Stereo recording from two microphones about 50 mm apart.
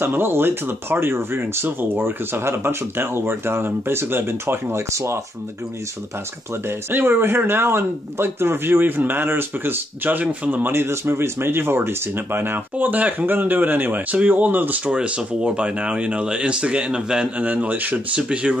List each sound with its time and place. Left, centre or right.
0.0 s speech: right
4.9 s speech: right
6.9 s speech: right
10.2 s speech: right
10.6 s speech: right
12.7 s speech: right
14.9 s speech: right
17.4 s speech: right
18.3 s speech: right